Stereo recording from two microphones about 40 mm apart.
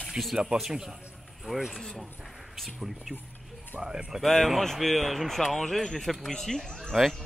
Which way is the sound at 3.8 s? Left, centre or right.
Right.